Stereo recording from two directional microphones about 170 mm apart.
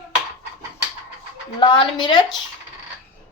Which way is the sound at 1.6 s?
25° left (ahead or behind).